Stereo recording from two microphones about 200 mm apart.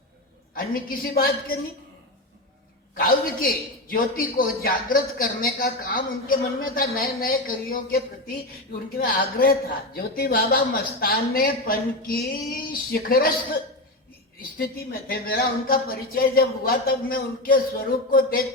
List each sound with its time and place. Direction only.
0.5 s speech: 45° left (ahead or behind)
2.9 s speech: 45° left (ahead or behind)
14.6 s speech: 50° left (ahead or behind)